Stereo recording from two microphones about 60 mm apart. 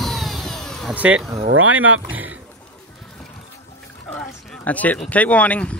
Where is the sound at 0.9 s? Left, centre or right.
Right.